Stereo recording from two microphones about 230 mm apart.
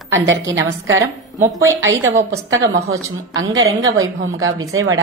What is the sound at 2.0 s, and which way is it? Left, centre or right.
A woman's voice, right.